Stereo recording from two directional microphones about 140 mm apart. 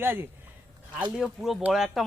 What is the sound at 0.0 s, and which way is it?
Speech, 15° right (ahead or behind).